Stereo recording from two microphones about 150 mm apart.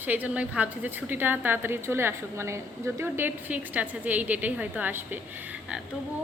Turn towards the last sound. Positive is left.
turn(degrees=-10)  # may be behind; listen again after turning